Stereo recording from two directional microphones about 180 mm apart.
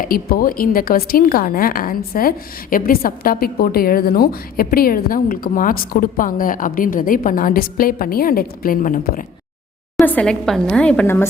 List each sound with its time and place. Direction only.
0.0 s a woman's voice: 55° left (ahead or behind)
10.0 s a woman's voice: 5° left (ahead or behind)